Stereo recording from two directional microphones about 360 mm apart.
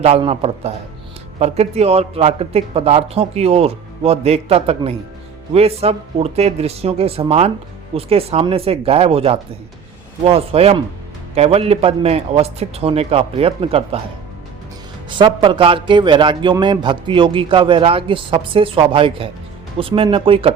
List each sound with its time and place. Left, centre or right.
0.0 s a man's voice: centre
15.1 s a man's voice: centre